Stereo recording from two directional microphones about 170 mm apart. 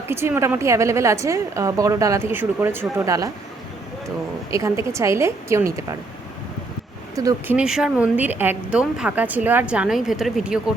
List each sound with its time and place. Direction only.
0.1 s speech: 15° right (ahead or behind)
4.5 s speech: 20° right (ahead or behind)
7.2 s speech: 20° right (ahead or behind)
7.5 s speech: 5° right (ahead or behind)